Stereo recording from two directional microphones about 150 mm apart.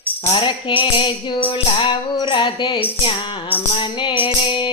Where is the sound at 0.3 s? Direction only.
35° left (ahead or behind).